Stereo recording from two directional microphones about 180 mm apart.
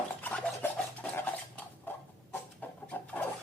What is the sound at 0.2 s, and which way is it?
Filing, 10° left (ahead or behind).